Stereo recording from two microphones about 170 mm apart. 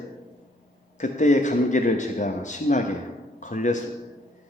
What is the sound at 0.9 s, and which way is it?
A man's voice, 45° left (ahead or behind).